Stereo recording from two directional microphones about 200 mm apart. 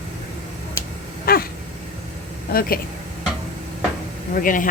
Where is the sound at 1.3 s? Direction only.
45° left (ahead or behind).